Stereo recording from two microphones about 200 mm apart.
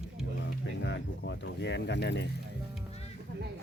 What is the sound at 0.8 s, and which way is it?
Speech, 60° left (ahead or behind).